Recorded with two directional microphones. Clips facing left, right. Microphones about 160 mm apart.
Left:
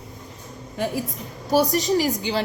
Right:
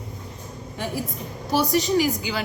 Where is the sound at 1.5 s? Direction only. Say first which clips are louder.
Left 2 dB; 40° left (ahead or behind).